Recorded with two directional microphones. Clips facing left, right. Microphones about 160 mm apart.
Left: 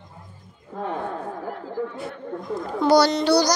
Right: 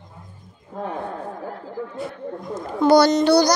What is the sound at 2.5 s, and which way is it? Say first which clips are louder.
A child's voice: right 2 dB; 50° right (ahead or behind).